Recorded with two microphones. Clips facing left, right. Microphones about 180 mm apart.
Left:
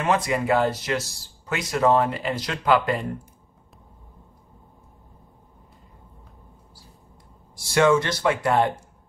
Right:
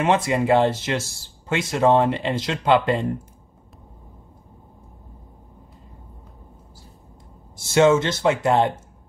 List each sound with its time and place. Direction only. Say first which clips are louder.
0.0 s speech: right 3 dB; 25° right (ahead or behind)
7.5 s speech: right 3 dB; 25° right (ahead or behind)